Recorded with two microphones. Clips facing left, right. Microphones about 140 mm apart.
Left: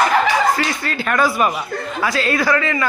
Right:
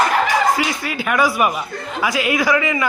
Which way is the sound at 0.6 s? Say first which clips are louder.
Even; 10° right (ahead or behind).